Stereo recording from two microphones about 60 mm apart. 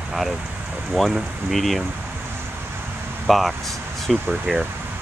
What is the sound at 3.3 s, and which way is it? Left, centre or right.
Speech, centre.